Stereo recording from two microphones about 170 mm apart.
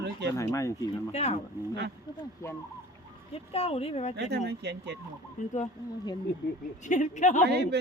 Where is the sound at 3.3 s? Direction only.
35° left (ahead or behind).